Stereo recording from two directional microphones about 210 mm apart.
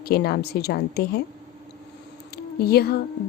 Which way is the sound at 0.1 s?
50° left (ahead or behind).